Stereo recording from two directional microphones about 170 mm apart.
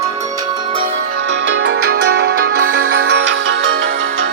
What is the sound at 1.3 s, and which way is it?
Music, 90° right.